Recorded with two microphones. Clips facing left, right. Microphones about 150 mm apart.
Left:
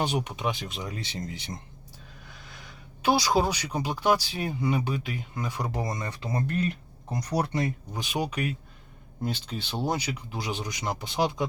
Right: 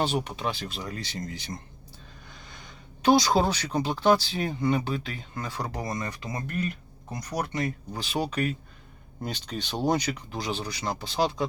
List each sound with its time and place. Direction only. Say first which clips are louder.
0.0 s speech: right 1 dB; 15° left (ahead or behind)
2.3 s speech: even; 5° left (ahead or behind); by 11.4 s 20° left (ahead or behind)